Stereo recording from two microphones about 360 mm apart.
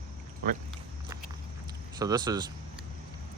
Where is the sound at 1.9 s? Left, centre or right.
Centre.